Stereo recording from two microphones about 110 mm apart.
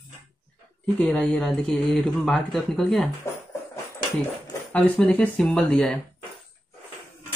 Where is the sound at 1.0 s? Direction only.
10° left (ahead or behind).